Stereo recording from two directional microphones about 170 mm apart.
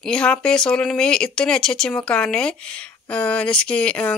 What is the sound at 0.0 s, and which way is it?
Speech, 5° left (ahead or behind).